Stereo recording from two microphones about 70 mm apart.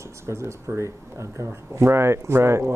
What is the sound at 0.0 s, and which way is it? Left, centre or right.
Speech, right.